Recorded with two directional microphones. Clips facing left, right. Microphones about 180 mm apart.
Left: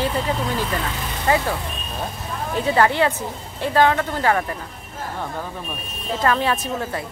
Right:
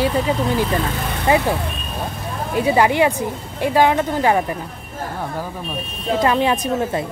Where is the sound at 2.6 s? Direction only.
15° right (ahead or behind).